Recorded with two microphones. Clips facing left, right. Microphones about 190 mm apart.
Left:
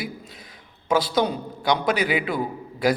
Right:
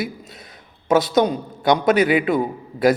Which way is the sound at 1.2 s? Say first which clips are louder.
Right 4 dB; 45° right (ahead or behind).